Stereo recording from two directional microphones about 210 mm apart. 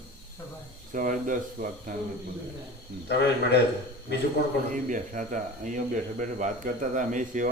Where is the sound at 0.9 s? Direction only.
40° right (ahead or behind).